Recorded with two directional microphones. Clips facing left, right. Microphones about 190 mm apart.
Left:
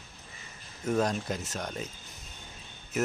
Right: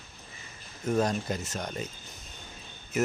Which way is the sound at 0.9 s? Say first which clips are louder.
Right 1 dB; centre (ahead or behind).